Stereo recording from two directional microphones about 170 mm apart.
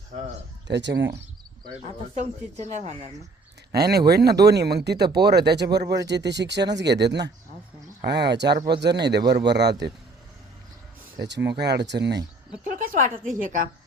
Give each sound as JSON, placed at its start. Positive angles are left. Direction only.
{"t": 0.7, "sound": "speech", "side_deg": -90}
{"t": 2.6, "sound": "a woman's voice", "side_deg": -45}
{"t": 3.7, "sound": "speech", "side_deg": -70}
{"t": 6.1, "sound": "speech", "side_deg": -90}
{"t": 11.2, "sound": "speech", "side_deg": -85}
{"t": 12.6, "sound": "a woman's voice", "side_deg": -55}